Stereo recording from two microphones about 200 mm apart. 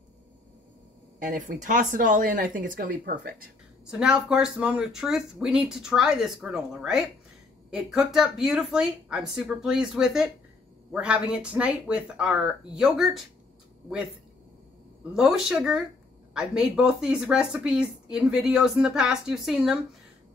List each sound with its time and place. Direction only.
1.2 s speech: 40° right (ahead or behind)
3.8 s speech: 5° right (ahead or behind)
15.1 s speech: 5° right (ahead or behind)